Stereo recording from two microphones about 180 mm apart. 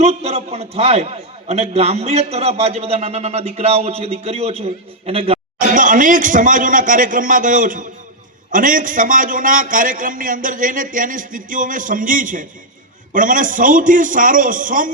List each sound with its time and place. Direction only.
0.0 s a man's voice: 35° right (ahead or behind)
5.5 s a man's voice: 45° right (ahead or behind)